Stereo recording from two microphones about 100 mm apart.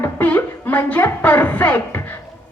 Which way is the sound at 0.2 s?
15° left (ahead or behind).